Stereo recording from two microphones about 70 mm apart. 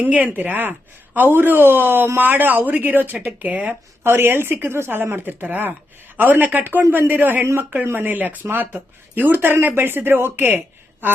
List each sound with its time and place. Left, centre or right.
0.0 s speech: right
4.0 s speech: right